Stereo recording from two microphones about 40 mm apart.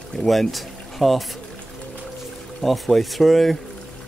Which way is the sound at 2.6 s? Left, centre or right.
Centre.